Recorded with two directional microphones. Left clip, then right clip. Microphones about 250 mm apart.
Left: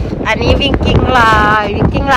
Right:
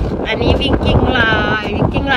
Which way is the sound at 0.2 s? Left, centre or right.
Centre.